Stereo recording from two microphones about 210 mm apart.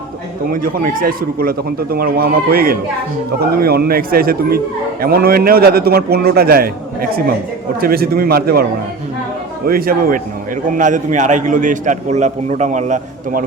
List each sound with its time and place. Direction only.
0.5 s speech: 40° right (ahead or behind)
9.6 s a man's voice: 45° right (ahead or behind)